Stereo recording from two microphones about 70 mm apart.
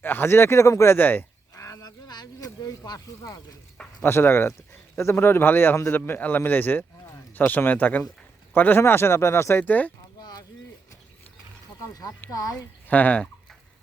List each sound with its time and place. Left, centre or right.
0.0 s speech: left
0.9 s a man's voice: left
1.5 s a sound: left
2.0 s a sound: left
4.0 s speech: left
5.9 s a man's voice: left
10.2 s a sound: left
12.3 s speech: left
12.9 s a man's voice: left